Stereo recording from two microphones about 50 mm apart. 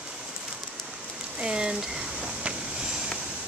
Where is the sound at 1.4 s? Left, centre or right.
Centre.